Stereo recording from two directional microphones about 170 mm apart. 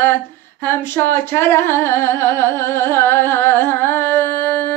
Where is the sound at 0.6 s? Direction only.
15° left (ahead or behind).